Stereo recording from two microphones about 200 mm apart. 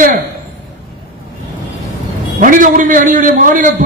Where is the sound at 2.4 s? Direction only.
40° right (ahead or behind).